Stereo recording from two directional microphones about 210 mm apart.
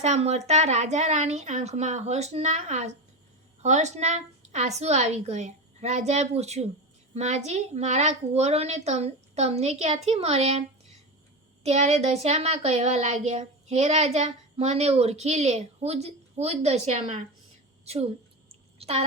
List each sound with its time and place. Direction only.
0.0 s speech: 30° right (ahead or behind)
11.6 s a woman's voice: 30° right (ahead or behind)
18.8 s a sound: 30° right (ahead or behind)